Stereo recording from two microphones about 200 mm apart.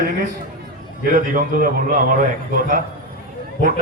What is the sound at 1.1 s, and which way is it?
A man's voice, 45° right (ahead or behind).